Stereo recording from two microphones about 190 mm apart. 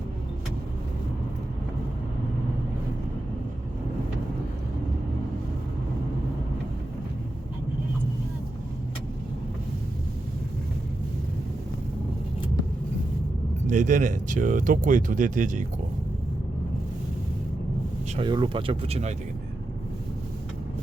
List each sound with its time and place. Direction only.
13.7 s speech: 40° right (ahead or behind)
18.2 s speech: 25° right (ahead or behind)